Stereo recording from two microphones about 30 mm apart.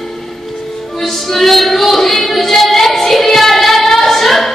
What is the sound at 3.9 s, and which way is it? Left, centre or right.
Singing, centre.